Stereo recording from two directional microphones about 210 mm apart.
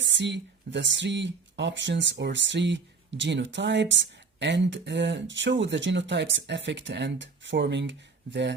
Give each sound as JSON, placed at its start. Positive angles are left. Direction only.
{"t": 0.0, "sound": "speech", "side_deg": -60}